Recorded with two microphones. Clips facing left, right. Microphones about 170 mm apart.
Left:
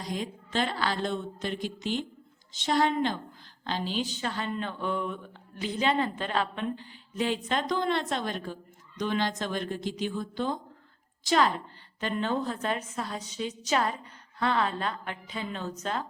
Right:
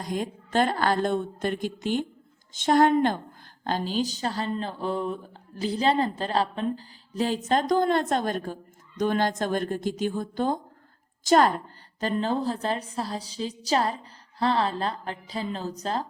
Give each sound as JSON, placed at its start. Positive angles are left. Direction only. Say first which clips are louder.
{"t": 0.0, "sound": "a woman's voice", "louder": "right 4 dB", "side_deg": -50}